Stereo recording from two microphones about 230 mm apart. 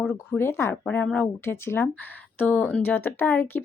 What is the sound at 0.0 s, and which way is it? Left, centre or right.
Speech, centre.